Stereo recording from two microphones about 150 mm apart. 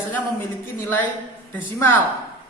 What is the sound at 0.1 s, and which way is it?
A woman's voice, 15° left (ahead or behind).